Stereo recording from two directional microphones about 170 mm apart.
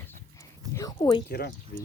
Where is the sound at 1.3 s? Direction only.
65° left (ahead or behind).